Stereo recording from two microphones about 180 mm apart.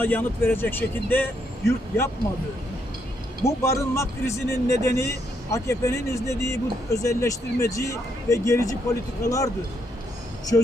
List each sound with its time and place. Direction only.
0.0 s speech: 10° left (ahead or behind)
3.4 s speech: 15° left (ahead or behind)
10.5 s speech: 20° left (ahead or behind)